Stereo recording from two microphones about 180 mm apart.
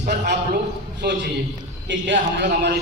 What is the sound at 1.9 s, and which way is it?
Speech, 85° right.